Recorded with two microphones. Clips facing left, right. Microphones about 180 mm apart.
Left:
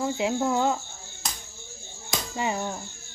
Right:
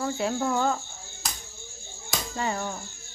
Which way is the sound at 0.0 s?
15° left (ahead or behind).